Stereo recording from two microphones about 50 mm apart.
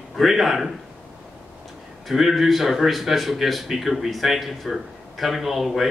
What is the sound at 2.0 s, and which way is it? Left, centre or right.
A man's voice, centre.